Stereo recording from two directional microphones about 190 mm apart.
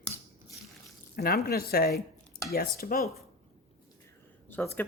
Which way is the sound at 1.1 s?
50° left (ahead or behind).